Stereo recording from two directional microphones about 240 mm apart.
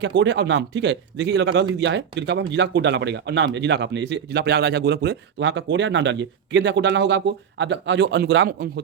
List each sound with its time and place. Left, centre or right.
0.0 s speech: right